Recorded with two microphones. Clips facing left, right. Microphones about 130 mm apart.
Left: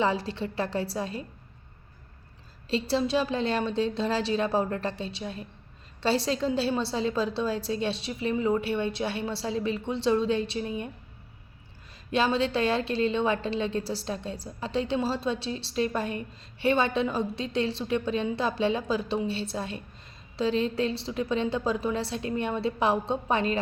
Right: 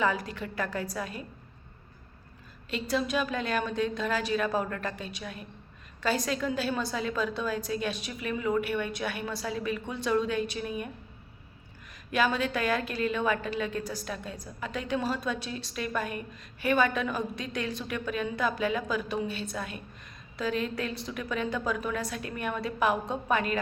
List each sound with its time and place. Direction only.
0.0 s a woman's voice: 30° left (ahead or behind)
2.6 s a woman's voice: 30° left (ahead or behind)
12.1 s a woman's voice: 30° left (ahead or behind)